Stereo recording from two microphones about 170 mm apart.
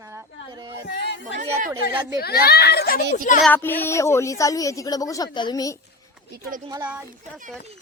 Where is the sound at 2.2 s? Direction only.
65° left (ahead or behind).